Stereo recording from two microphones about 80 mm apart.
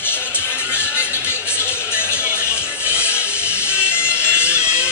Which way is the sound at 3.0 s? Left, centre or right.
Left.